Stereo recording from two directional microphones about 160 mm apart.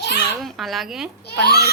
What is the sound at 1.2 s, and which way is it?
Speech, 90° left.